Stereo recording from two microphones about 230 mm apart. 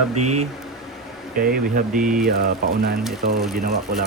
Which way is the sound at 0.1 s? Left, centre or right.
Right.